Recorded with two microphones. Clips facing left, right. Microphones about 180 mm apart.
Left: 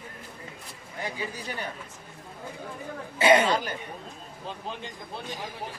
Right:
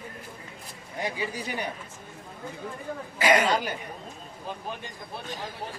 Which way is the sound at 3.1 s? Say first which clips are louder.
Left 3 dB; 25° left (ahead or behind).